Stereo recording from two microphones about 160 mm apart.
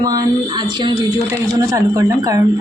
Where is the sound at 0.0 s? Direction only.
25° right (ahead or behind).